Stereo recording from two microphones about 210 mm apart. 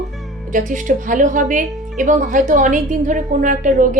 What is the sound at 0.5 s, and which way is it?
Speech, 40° right (ahead or behind).